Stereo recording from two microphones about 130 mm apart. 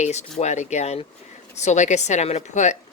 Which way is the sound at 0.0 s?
60° left (ahead or behind).